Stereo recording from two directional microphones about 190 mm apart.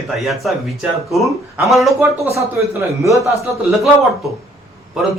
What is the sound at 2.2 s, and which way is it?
Speech, 15° right (ahead or behind).